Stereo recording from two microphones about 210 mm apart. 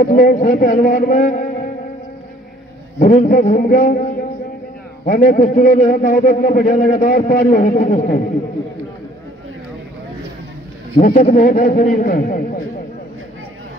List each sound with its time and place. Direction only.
0.0 s a man's voice: 40° left (ahead or behind)
3.0 s a man's voice: 40° left (ahead or behind)
5.0 s a man's voice: 45° left (ahead or behind)
11.0 s a man's voice: 35° left (ahead or behind)